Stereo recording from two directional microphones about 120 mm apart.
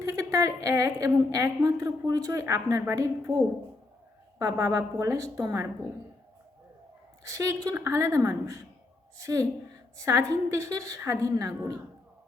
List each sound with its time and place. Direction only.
0.0 s a woman's voice: 25° right (ahead or behind)
4.4 s a woman's voice: 30° right (ahead or behind)
7.3 s a woman's voice: 25° right (ahead or behind)